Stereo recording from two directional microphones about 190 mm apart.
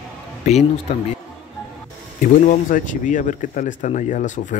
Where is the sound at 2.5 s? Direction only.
45° left (ahead or behind).